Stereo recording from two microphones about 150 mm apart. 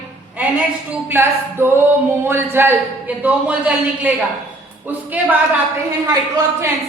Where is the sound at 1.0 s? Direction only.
15° right (ahead or behind).